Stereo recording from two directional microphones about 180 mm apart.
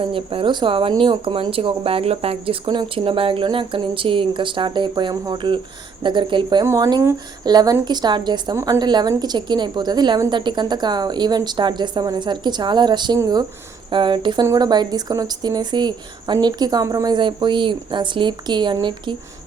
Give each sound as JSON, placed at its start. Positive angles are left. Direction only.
{"t": 0.0, "sound": "speech", "side_deg": -30}